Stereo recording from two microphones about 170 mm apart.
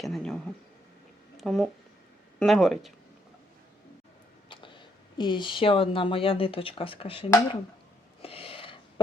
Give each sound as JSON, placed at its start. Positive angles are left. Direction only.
{"t": 0.0, "sound": "speech", "side_deg": 0}
{"t": 1.4, "sound": "speech", "side_deg": 0}
{"t": 4.4, "sound": "speech", "side_deg": 30}
{"t": 8.2, "sound": "a sound", "side_deg": 35}